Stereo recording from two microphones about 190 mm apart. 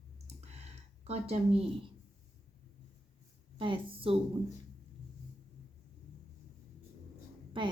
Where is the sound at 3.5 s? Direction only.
25° right (ahead or behind).